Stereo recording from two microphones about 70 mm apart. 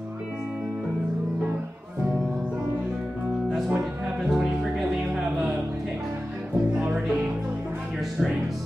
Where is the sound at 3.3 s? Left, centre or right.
Centre.